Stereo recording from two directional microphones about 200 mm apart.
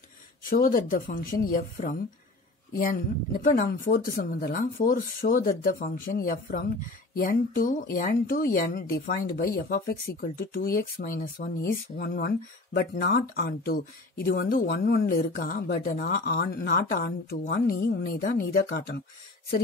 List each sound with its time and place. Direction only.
0.4 s speech: 45° left (ahead or behind)